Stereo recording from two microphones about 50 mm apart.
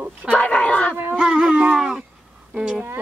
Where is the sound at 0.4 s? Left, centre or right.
Left.